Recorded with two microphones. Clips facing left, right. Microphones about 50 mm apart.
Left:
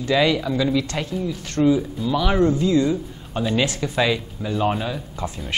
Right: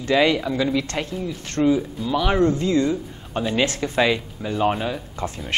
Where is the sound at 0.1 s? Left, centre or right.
Right.